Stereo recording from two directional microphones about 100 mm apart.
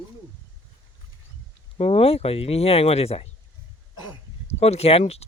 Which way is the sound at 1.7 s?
75° left (ahead or behind).